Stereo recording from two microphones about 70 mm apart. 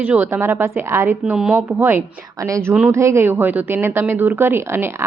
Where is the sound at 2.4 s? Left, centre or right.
Right.